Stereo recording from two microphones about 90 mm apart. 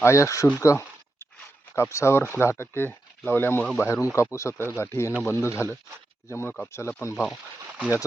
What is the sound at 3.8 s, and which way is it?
Speech, 35° left (ahead or behind).